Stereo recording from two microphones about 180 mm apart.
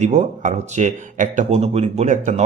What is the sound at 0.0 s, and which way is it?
A man's voice, 40° right (ahead or behind).